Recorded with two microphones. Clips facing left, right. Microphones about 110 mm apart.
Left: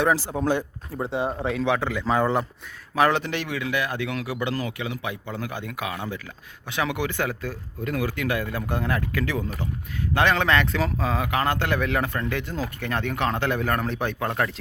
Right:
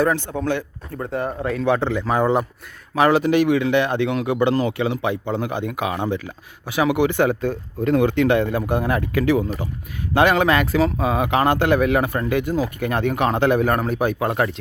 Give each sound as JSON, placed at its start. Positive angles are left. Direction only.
{"t": 0.3, "sound": "speech", "side_deg": 10}
{"t": 1.4, "sound": "speech", "side_deg": 0}
{"t": 1.8, "sound": "speech", "side_deg": -20}
{"t": 2.9, "sound": "speech", "side_deg": -5}
{"t": 3.6, "sound": "speech", "side_deg": -30}
{"t": 6.7, "sound": "speech", "side_deg": -10}